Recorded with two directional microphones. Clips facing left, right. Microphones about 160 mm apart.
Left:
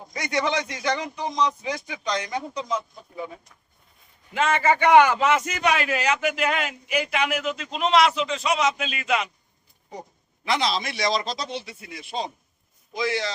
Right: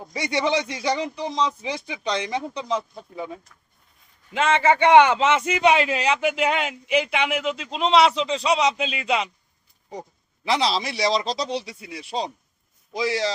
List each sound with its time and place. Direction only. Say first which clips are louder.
0.3 s speech: right 2 dB; 30° right (ahead or behind)
4.4 s speech: right 2 dB; 25° right (ahead or behind)
10.4 s speech: right 2 dB; 30° right (ahead or behind)